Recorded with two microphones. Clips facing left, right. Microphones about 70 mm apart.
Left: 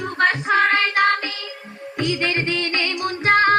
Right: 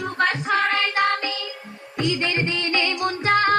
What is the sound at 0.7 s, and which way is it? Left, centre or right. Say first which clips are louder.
Music: left 3 dB; left.